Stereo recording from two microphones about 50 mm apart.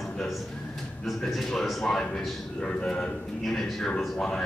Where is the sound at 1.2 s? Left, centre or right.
Centre.